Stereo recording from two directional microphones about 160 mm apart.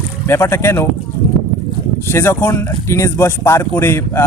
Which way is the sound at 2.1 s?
15° left (ahead or behind).